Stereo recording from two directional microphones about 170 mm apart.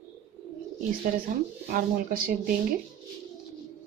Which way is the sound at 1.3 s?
50° right (ahead or behind).